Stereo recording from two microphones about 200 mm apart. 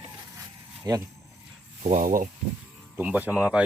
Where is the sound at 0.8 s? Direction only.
20° right (ahead or behind).